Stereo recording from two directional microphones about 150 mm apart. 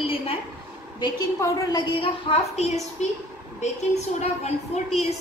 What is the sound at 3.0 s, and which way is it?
Speech, 50° left (ahead or behind).